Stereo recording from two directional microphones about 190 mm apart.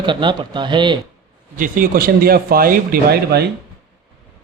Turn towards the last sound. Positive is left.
turn(degrees=-50)  # may be behind; listen again after turning